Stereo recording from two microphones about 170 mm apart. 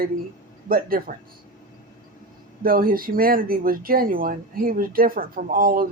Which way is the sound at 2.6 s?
60° right (ahead or behind).